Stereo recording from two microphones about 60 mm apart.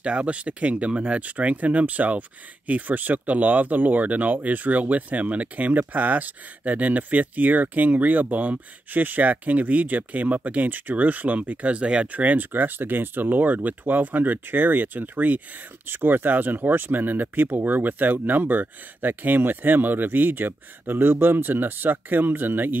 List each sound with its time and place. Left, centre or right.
0.0 s speech: right